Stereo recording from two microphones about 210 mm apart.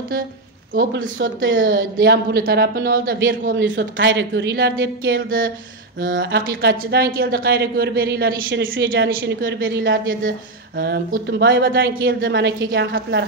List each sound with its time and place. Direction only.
0.7 s a man's voice: 65° right (ahead or behind); by 8.4 s 45° right (ahead or behind)
8.5 s speech: 65° right (ahead or behind)
10.8 s a man's voice: 45° right (ahead or behind)
11.8 s a man's voice: 45° right (ahead or behind)